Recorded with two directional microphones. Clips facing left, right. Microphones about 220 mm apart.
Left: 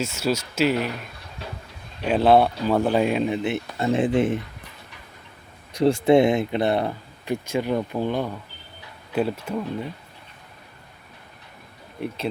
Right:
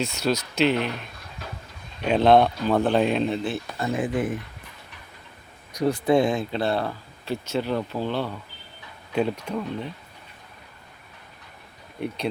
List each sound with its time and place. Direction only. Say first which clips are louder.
0.0 s speech: even; 5° left (ahead or behind)
2.0 s speech: even; 5° left (ahead or behind); by 4.4 s 25° left (ahead or behind)
5.7 s speech: left 4 dB; 30° left (ahead or behind); by 9.6 s 5° left (ahead or behind)
11.9 s speech: even; centre (ahead or behind)